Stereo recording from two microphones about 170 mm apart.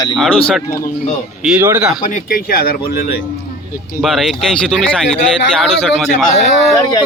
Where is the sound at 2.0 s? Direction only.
55° left (ahead or behind).